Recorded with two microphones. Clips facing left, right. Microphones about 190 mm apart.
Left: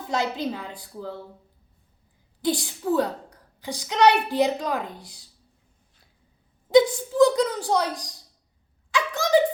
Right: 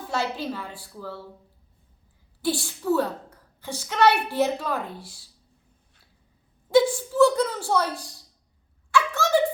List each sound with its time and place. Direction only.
0.1 s a woman's voice: 15° left (ahead or behind)
2.4 s a woman's voice: 15° left (ahead or behind)
6.7 s a woman's voice: 20° left (ahead or behind)
8.9 s a sound: 15° left (ahead or behind)